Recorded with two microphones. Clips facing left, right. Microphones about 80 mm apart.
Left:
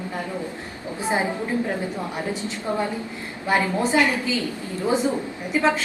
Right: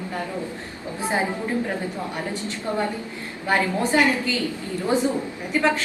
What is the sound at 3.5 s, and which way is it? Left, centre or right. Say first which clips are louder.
Speech: even; centre.